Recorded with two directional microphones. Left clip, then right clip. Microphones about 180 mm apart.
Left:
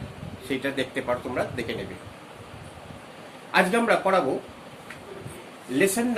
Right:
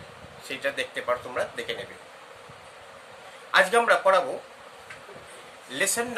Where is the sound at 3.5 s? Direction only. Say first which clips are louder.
Right 1 dB; 35° right (ahead or behind).